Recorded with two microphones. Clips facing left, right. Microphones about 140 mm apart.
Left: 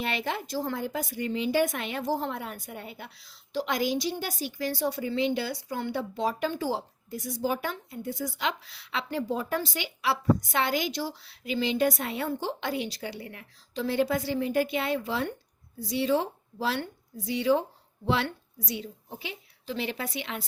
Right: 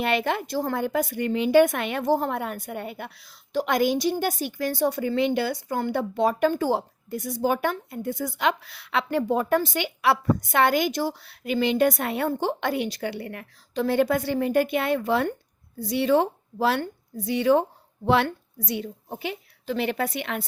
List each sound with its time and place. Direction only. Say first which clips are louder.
0.0 s a woman's voice: right 7 dB; 60° right (ahead or behind)